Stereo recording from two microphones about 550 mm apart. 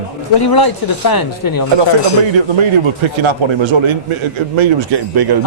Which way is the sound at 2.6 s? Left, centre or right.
Right.